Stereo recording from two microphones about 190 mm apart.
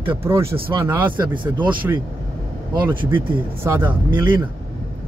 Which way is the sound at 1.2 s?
25° right (ahead or behind).